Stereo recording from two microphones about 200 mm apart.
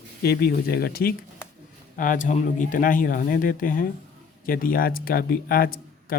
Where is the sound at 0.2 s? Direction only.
50° left (ahead or behind).